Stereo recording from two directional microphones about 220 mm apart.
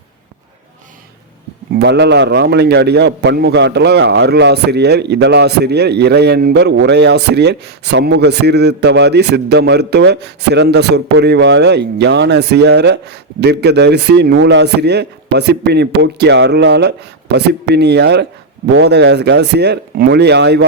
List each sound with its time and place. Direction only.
1.7 s a man's voice: 50° right (ahead or behind)